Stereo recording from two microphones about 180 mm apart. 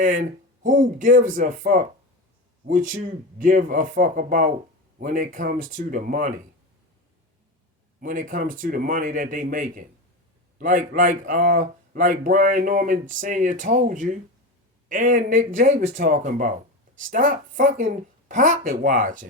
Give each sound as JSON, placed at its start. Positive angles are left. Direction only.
{"t": 0.0, "sound": "speech", "side_deg": -45}
{"t": 8.0, "sound": "speech", "side_deg": -45}